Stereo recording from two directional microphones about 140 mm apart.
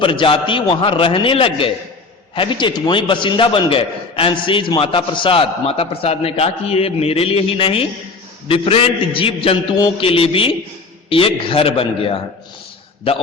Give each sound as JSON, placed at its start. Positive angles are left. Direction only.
{"t": 0.0, "sound": "a man's voice", "side_deg": 35}